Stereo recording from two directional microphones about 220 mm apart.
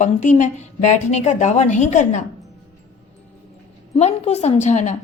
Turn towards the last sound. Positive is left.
turn(degrees=30)  # may be behind; listen again after turning